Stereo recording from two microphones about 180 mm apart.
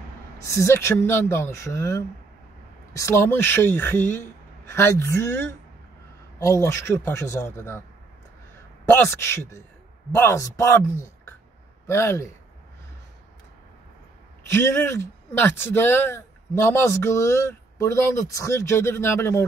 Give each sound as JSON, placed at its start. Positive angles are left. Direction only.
{"t": 0.4, "sound": "speech", "side_deg": 15}
{"t": 8.8, "sound": "speech", "side_deg": 10}
{"t": 11.9, "sound": "speech", "side_deg": 15}
{"t": 14.5, "sound": "speech", "side_deg": 15}